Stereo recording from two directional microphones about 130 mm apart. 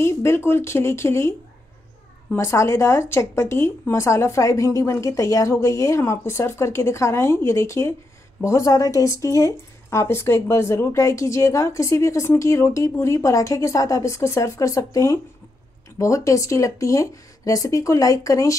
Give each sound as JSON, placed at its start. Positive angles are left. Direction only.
{"t": 0.0, "sound": "speech", "side_deg": 20}
{"t": 2.3, "sound": "speech", "side_deg": 20}